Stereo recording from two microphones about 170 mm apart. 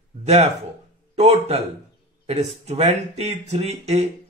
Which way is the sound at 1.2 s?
40° right (ahead or behind).